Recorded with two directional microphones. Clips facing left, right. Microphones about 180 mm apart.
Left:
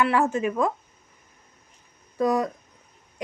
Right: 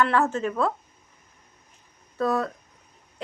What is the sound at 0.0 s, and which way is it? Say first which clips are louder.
Speech: left 1 dB; 10° left (ahead or behind).